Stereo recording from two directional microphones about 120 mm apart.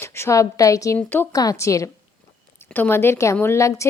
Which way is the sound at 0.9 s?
15° left (ahead or behind).